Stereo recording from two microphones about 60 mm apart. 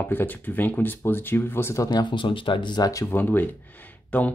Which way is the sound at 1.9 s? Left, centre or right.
Left.